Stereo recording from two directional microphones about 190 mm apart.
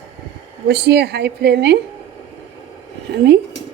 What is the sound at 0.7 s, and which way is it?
A woman's voice, 60° right (ahead or behind).